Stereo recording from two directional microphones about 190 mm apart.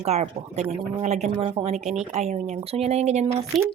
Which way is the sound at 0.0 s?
35° right (ahead or behind).